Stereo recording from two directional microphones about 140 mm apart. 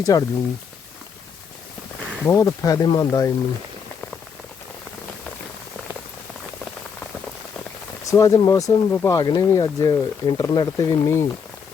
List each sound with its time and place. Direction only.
0.0 s speech: 25° left (ahead or behind)
2.2 s speech: 25° left (ahead or behind)
8.0 s speech: 20° left (ahead or behind)